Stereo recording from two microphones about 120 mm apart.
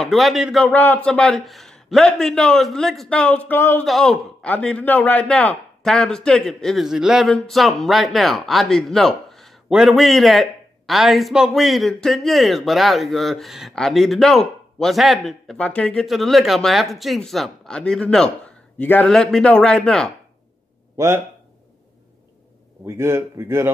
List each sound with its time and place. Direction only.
0.0 s speech: centre (ahead or behind)
0.7 s a man's voice: 15° left (ahead or behind)
3.8 s a man's voice: centre (ahead or behind)
19.0 s speech: 5° left (ahead or behind)
20.9 s speech: 25° right (ahead or behind)
22.8 s a man's voice: 20° right (ahead or behind)